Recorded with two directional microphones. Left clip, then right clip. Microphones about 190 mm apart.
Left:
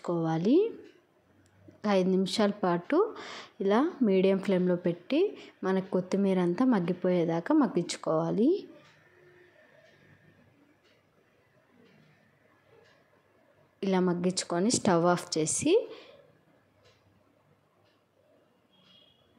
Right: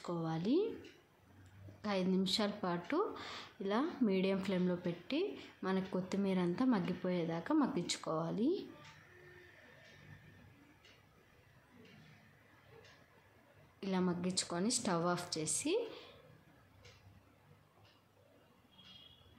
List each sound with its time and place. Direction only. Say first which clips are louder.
0.0 s a woman's voice: left 11 dB; 30° left (ahead or behind)
1.8 s a woman's voice: left 10 dB; 35° left (ahead or behind)
13.7 s a woman's voice: left 10 dB; 35° left (ahead or behind)